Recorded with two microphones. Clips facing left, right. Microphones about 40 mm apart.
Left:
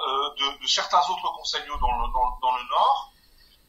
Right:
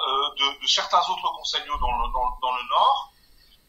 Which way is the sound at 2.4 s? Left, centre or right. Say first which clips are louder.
Right 2 dB; right.